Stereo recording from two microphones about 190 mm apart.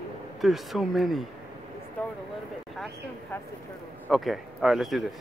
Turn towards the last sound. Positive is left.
turn(degrees=0)  # may be behind; listen again after turning